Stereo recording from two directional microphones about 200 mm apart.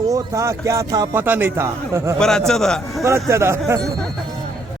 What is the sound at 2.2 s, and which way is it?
Speech, 5° left (ahead or behind).